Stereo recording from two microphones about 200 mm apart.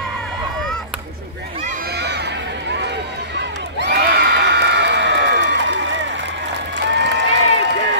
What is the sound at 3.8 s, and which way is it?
Crowd, 55° right (ahead or behind).